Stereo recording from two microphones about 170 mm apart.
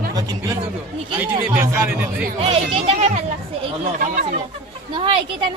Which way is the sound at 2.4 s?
35° right (ahead or behind).